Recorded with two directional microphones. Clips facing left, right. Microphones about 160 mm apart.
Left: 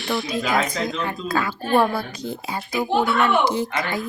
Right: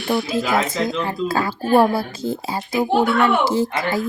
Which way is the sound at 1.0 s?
35° right (ahead or behind).